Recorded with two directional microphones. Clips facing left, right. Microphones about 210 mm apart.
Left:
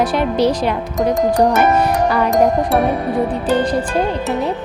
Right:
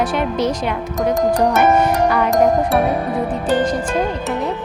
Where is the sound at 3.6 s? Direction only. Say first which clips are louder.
Left 1 dB; 35° left (ahead or behind).